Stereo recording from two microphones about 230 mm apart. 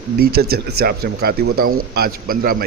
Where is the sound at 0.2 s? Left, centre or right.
Right.